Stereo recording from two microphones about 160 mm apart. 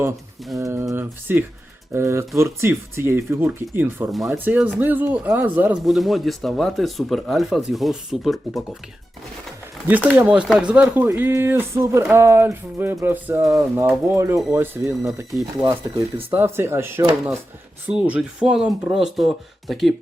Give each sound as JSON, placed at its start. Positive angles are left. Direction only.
{"t": 0.5, "sound": "speech", "side_deg": -20}
{"t": 5.8, "sound": "speech", "side_deg": 0}
{"t": 10.2, "sound": "speech", "side_deg": -10}